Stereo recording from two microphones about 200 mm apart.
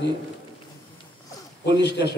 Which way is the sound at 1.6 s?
55° left (ahead or behind).